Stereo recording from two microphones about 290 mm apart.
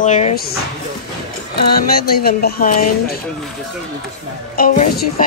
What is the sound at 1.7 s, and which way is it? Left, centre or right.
Speech, left.